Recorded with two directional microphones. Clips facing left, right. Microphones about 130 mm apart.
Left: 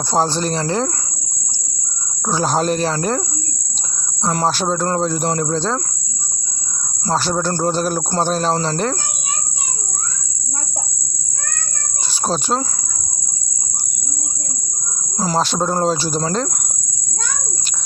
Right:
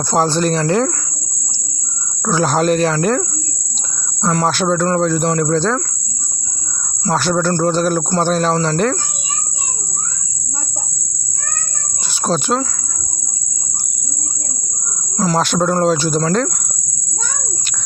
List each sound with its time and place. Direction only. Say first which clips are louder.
0.1 s speech: right 3 dB; 30° left (ahead or behind)
2.2 s speech: right 3 dB; 35° left (ahead or behind)
7.0 s speech: right 3 dB; 35° left (ahead or behind)
12.2 s speech: right 3 dB; 35° left (ahead or behind)
15.4 s speech: right 2 dB; 30° left (ahead or behind)